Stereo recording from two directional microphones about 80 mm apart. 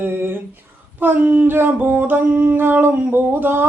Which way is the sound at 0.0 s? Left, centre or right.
Right.